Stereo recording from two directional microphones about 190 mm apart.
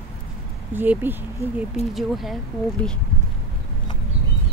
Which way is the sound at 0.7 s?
10° right (ahead or behind).